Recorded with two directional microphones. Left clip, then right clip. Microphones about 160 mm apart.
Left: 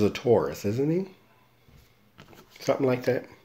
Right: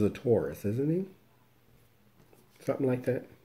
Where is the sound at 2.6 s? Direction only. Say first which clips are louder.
Left 6 dB; 20° right (ahead or behind).